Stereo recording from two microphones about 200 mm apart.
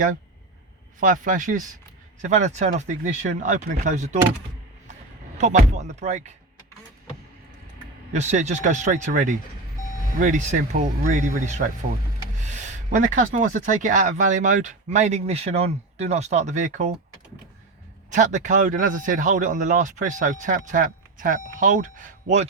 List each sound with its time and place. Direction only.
0.9 s speech: 40° right (ahead or behind)
5.4 s speech: 35° right (ahead or behind)
8.1 s speech: 35° right (ahead or behind)
18.1 s speech: 40° right (ahead or behind)